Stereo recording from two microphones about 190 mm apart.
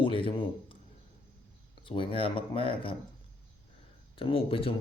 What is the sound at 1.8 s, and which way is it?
Speech, 25° left (ahead or behind).